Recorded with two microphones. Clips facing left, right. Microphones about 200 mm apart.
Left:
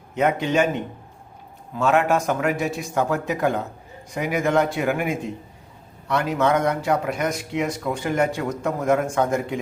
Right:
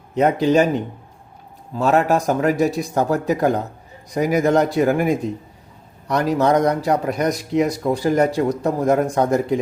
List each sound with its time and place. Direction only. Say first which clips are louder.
0.1 s speech: right 5 dB; 35° right (ahead or behind)